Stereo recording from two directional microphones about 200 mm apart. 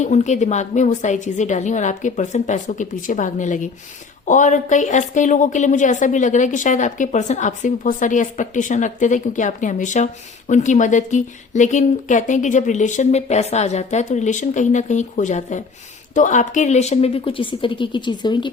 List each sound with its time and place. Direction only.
0.0 s a woman's voice: 35° left (ahead or behind)